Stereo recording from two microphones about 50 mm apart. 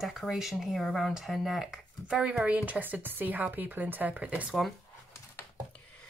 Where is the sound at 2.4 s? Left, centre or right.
Right.